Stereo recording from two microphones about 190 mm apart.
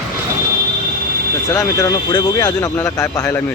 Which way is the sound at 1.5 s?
20° left (ahead or behind).